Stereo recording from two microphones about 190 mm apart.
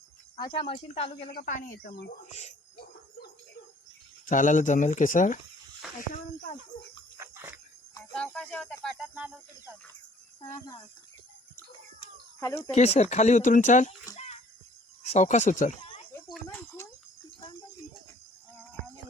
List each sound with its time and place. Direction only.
0.3 s a woman's voice: 25° left (ahead or behind)
1.3 s speech: 45° left (ahead or behind)
2.2 s speech: 35° left (ahead or behind)
4.3 s speech: 40° left (ahead or behind)
7.2 s a sound: 10° right (ahead or behind)
8.1 s speech: 5° left (ahead or behind)
9.1 s speech: 10° right (ahead or behind)
12.4 s speech: 15° left (ahead or behind)
12.7 s speech: 35° left (ahead or behind)
15.0 s speech: 35° left (ahead or behind)
16.3 s speech: 10° left (ahead or behind)